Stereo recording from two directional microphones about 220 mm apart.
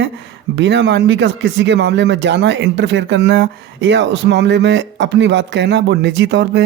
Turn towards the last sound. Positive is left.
turn(degrees=-55)  # may be behind; listen again after turning